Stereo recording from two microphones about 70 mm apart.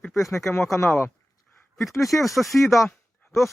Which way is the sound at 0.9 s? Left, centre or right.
Left.